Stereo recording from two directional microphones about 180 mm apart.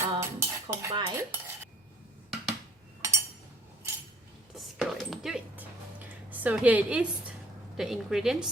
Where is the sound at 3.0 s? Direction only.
15° right (ahead or behind).